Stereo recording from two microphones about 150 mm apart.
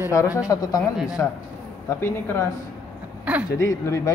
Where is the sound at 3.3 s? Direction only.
10° right (ahead or behind).